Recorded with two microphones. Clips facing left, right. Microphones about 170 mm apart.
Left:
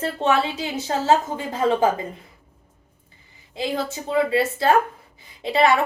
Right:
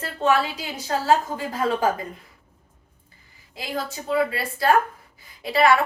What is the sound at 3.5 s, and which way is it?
A woman's voice, 25° left (ahead or behind).